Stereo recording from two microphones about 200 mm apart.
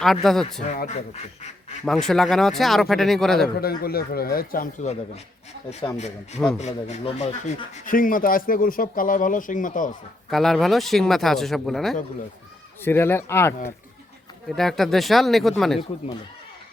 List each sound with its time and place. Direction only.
0.0 s speech: centre (ahead or behind)
0.8 s speech: 35° left (ahead or behind)
1.8 s speech: centre (ahead or behind)
3.6 s speech: 50° left (ahead or behind)
10.2 s speech: centre (ahead or behind)
12.8 s speech: 10° left (ahead or behind)
14.5 s speech: centre (ahead or behind)